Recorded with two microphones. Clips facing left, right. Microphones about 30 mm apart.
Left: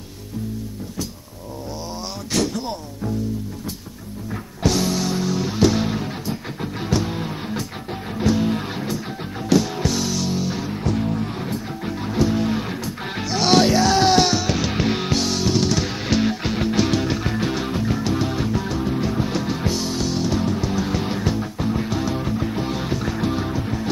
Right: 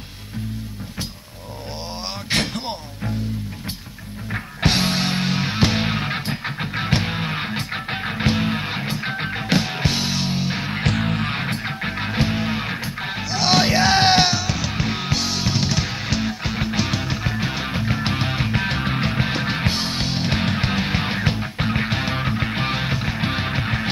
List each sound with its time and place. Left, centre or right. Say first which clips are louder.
2.3 s a sound: left 1 dB; right
4.3 s music: right 1 dB; right
10.7 s music: right 2 dB; right
13.1 s music: left 2 dB; centre
13.7 s music: even; right
14.4 s music: left 3 dB; centre
16.1 s music: left 4 dB; centre
16.5 s music: left 3 dB; centre
17.6 s music: left 1 dB; right
18.0 s music: left 1 dB; right
20.3 s music: even; right
23.3 s music: right 1 dB; right